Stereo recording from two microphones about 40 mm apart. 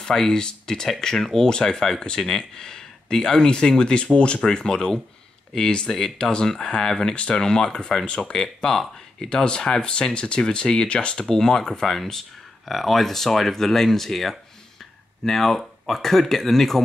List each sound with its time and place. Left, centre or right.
0.0 s speech: centre
11.2 s speech: centre